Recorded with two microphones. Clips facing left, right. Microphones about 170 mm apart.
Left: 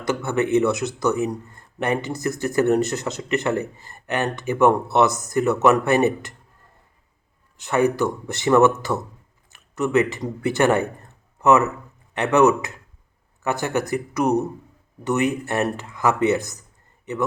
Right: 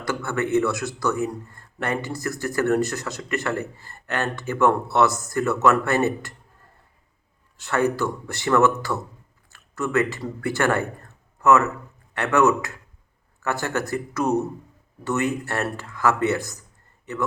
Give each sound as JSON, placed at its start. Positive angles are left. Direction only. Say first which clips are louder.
{"t": 0.0, "sound": "speech", "louder": "left 3 dB", "side_deg": 20}
{"t": 7.5, "sound": "speech", "louder": "left 3 dB", "side_deg": 15}